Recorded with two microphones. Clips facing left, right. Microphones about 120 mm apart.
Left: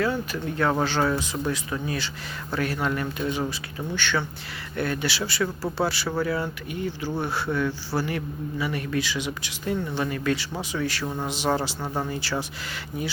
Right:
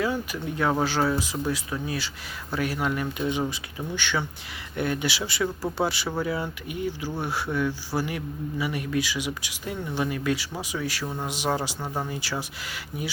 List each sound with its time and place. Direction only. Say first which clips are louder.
0.0 s a man's voice: left 1 dB; 10° right (ahead or behind)
11.0 s speech: left 2 dB; 5° left (ahead or behind)
11.3 s a man's voice: left 2 dB; 10° right (ahead or behind)